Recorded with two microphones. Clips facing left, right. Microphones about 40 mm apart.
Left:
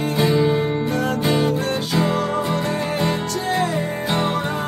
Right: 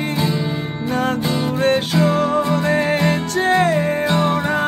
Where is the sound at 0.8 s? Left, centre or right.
Right.